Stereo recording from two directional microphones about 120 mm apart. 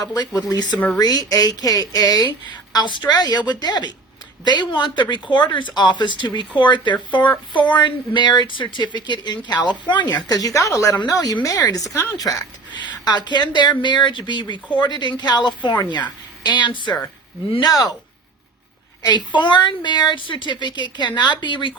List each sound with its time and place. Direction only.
0.0 s speech: 35° left (ahead or behind)
19.0 s speech: 40° left (ahead or behind)